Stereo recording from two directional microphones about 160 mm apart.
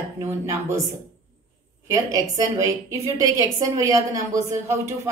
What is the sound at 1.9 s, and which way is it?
A woman's voice, 20° right (ahead or behind).